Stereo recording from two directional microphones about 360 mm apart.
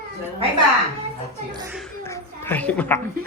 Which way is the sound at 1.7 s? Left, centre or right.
Centre.